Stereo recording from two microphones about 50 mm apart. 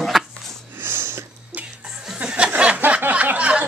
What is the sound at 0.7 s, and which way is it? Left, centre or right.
Wheeze, right.